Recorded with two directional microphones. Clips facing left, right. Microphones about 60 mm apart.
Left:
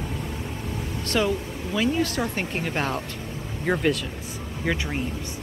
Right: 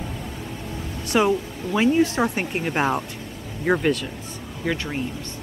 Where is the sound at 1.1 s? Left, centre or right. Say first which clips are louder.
Right 5 dB; right.